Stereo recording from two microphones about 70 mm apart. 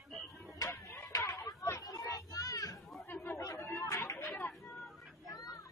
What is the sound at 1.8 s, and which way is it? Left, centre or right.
Children playing, left.